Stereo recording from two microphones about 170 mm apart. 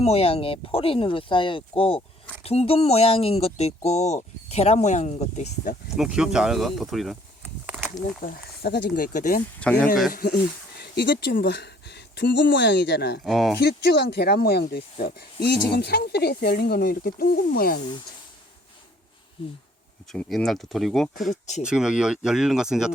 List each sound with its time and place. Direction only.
0.0 s speech: 35° left (ahead or behind)
6.0 s speech: 5° right (ahead or behind)
7.4 s a sound: 10° right (ahead or behind)
8.2 s speech: 65° left (ahead or behind)
9.0 s speech: 50° left (ahead or behind)
9.6 s speech: 10° left (ahead or behind)
10.1 s speech: 55° left (ahead or behind); by 13.2 s 75° left (ahead or behind)
13.2 s speech: centre (ahead or behind)
13.6 s speech: 75° left (ahead or behind); by 17.7 s 60° left (ahead or behind)
19.4 s speech: 30° left (ahead or behind)
20.1 s speech: 5° left (ahead or behind)